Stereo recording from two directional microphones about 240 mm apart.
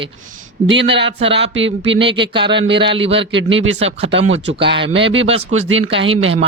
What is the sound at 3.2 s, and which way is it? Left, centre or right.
Speech, right.